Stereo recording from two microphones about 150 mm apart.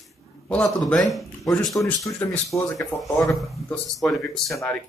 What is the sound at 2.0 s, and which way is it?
Speech, 20° left (ahead or behind).